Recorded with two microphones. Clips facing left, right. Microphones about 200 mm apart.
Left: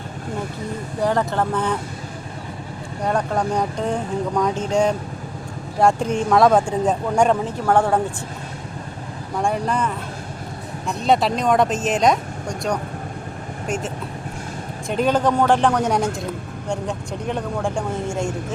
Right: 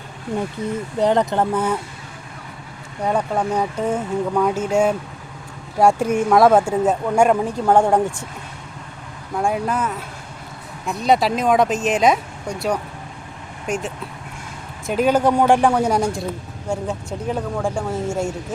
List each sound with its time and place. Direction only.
0.6 s speech: 20° right (ahead or behind)
3.0 s speech: 10° right (ahead or behind)
9.4 s speech: 5° right (ahead or behind)
14.8 s speech: 5° right (ahead or behind)
15.8 s speech: centre (ahead or behind)